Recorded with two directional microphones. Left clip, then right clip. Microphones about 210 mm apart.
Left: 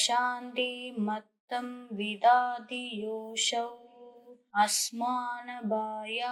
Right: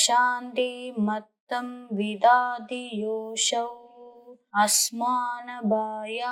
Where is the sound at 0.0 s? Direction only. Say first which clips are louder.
Right 7 dB; 35° right (ahead or behind).